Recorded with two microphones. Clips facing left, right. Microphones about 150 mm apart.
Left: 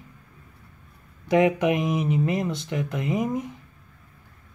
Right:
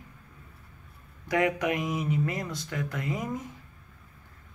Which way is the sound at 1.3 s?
25° left (ahead or behind).